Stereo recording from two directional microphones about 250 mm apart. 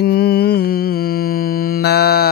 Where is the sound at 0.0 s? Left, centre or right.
Left.